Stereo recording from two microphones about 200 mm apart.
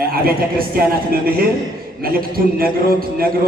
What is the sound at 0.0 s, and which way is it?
A man's voice, 45° right (ahead or behind).